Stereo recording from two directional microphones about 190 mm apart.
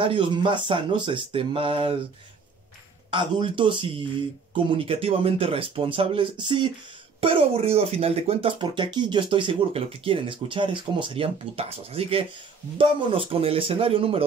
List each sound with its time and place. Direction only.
0.0 s speech: 25° right (ahead or behind)
3.1 s speech: 25° right (ahead or behind)